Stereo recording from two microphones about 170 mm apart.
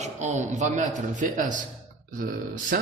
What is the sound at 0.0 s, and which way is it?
Speech, 45° right (ahead or behind).